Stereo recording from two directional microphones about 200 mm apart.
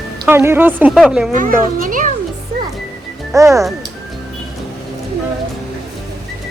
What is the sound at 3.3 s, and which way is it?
Speech, 15° right (ahead or behind).